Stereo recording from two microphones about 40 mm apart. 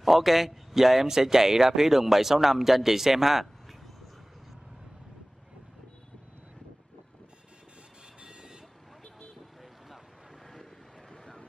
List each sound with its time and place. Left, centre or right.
0.0 s a man's voice: centre
8.2 s vehicle: centre
11.1 s vehicle: centre